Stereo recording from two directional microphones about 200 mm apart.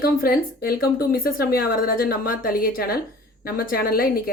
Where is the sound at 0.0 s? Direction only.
45° left (ahead or behind).